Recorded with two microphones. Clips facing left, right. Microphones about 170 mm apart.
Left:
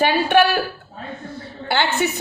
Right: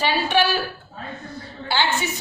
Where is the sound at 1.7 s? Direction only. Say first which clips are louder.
Left 3 dB; 60° left (ahead or behind).